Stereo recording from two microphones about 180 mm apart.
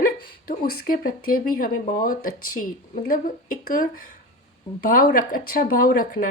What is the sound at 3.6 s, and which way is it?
A woman's voice, 50° left (ahead or behind).